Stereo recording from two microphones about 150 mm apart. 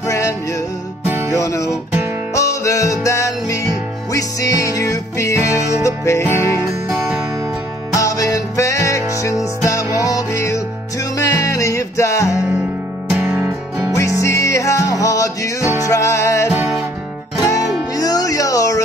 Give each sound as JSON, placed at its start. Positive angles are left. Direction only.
{"t": 0.0, "sound": "music", "side_deg": 20}
{"t": 7.9, "sound": "music", "side_deg": 20}
{"t": 13.1, "sound": "music", "side_deg": -10}
{"t": 13.9, "sound": "music", "side_deg": 20}